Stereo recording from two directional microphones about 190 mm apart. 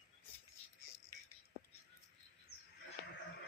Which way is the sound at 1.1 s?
15° left (ahead or behind).